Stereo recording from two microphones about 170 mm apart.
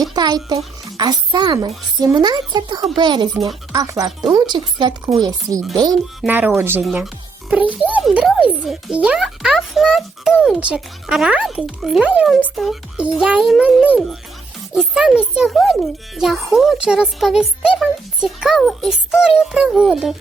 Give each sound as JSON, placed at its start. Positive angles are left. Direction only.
{"t": 0.1, "sound": "a child's voice", "side_deg": -25}
{"t": 6.2, "sound": "speech", "side_deg": -10}
{"t": 6.8, "sound": "speech", "side_deg": -5}